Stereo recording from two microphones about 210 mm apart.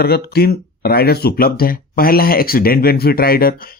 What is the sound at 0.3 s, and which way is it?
Speech, 50° left (ahead or behind).